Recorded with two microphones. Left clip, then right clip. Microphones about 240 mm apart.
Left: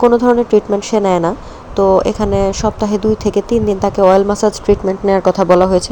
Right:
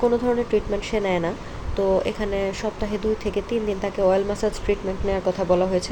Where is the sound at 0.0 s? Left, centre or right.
Left.